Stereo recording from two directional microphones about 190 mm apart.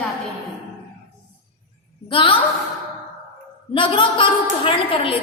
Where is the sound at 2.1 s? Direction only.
30° left (ahead or behind).